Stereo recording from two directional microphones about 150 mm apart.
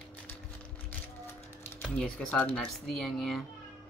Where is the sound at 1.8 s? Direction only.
5° left (ahead or behind).